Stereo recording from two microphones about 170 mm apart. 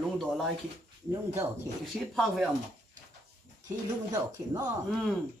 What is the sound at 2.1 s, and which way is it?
Speech, centre (ahead or behind).